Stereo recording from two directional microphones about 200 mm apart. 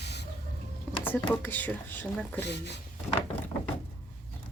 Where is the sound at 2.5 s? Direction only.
60° left (ahead or behind).